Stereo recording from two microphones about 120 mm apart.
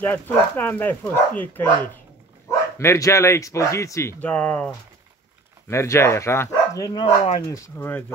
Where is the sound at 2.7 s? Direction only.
25° left (ahead or behind).